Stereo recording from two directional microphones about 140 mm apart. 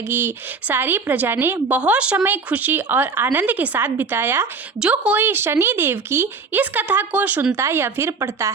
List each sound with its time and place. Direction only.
0.1 s speech: 15° right (ahead or behind)